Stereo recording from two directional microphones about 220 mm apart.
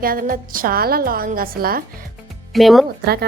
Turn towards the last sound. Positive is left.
turn(degrees=-45)  # may be behind; listen again after turning